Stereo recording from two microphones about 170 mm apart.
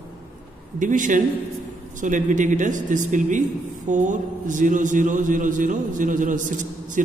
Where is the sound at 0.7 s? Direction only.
50° right (ahead or behind).